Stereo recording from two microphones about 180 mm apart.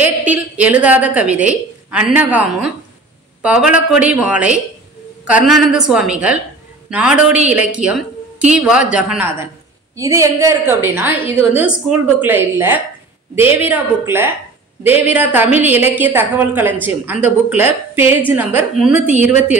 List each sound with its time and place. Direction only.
0.0 s a woman's voice: 10° right (ahead or behind)